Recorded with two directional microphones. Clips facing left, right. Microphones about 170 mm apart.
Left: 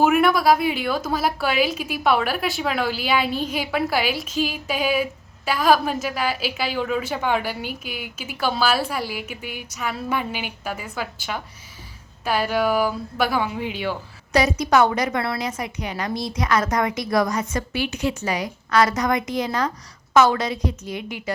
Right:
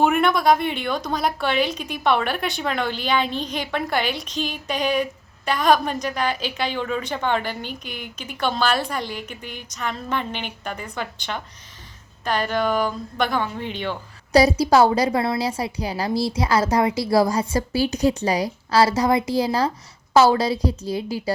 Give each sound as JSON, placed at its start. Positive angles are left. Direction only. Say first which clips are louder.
{"t": 0.0, "sound": "a woman's voice", "louder": "left 1 dB", "side_deg": 5}
{"t": 14.3, "sound": "a woman's voice", "louder": "right 3 dB", "side_deg": -35}